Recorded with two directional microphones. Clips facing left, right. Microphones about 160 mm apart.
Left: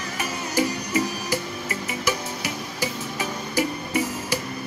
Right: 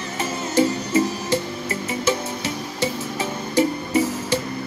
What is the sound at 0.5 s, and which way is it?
Music, 25° right (ahead or behind).